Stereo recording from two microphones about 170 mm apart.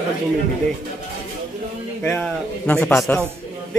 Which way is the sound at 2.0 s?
10° left (ahead or behind).